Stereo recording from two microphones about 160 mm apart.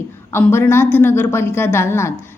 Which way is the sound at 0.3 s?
15° left (ahead or behind).